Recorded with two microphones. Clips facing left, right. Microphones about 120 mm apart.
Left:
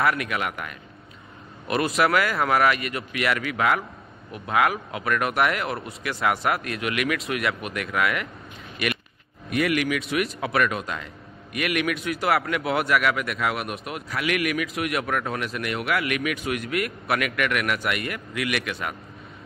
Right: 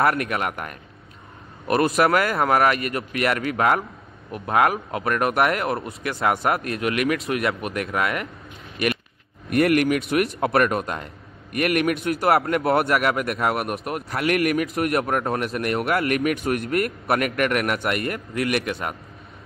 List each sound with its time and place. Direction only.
0.0 s speech: 40° right (ahead or behind)
1.9 s speech: 30° right (ahead or behind)
9.5 s speech: 55° right (ahead or behind)
12.3 s speech: 35° right (ahead or behind)